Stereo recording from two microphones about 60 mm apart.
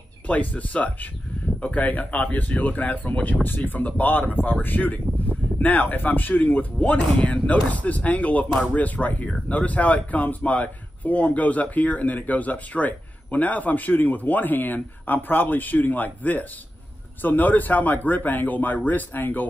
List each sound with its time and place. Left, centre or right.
0.3 s speech: left